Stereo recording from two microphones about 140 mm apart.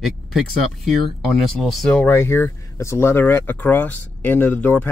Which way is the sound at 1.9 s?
15° left (ahead or behind).